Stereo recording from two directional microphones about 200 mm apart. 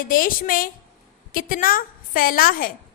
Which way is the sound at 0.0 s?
45° left (ahead or behind).